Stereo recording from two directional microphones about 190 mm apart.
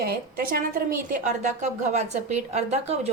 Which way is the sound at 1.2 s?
40° right (ahead or behind).